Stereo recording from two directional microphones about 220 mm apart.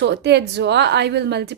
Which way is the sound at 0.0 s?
50° right (ahead or behind).